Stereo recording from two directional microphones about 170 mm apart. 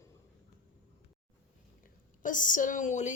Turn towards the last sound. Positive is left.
turn(degrees=45)  # may be behind; listen again after turning